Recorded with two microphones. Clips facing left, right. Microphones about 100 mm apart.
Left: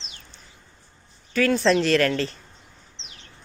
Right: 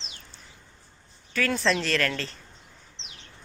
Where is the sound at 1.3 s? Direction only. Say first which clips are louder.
Left 6 dB; 5° left (ahead or behind).